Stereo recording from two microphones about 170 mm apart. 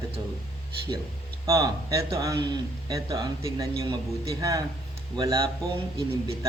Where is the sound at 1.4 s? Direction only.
20° right (ahead or behind).